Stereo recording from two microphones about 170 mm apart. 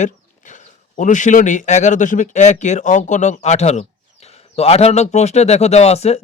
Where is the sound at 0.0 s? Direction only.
45° left (ahead or behind).